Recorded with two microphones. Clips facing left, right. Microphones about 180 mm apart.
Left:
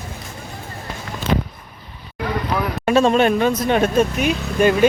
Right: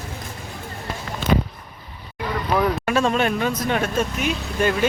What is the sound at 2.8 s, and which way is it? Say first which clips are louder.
Speech: left 5 dB; 25° left (ahead or behind).